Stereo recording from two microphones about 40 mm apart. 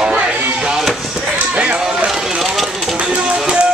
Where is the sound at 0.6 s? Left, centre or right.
Centre.